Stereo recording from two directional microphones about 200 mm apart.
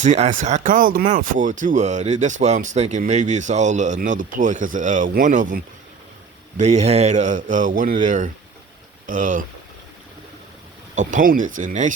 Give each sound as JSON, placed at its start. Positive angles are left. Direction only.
{"t": 0.0, "sound": "speech", "side_deg": -35}
{"t": 10.9, "sound": "speech", "side_deg": -40}